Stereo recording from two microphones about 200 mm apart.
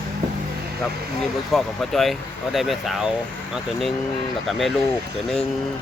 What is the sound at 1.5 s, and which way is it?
Speech, centre (ahead or behind).